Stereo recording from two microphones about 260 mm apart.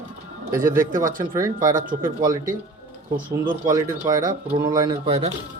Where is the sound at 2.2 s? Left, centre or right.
Centre.